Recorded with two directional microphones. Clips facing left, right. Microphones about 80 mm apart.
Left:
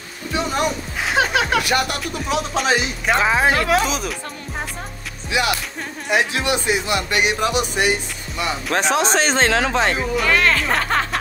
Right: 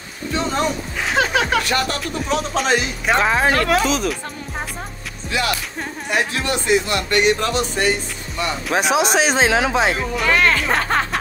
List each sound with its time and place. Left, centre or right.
0.3 s speech: centre
5.3 s music: centre
6.0 s speech: centre
8.7 s speech: centre